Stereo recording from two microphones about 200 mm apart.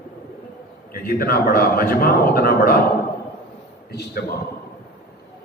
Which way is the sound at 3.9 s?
50° left (ahead or behind).